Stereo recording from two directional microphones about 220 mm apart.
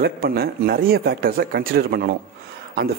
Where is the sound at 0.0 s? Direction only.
45° right (ahead or behind).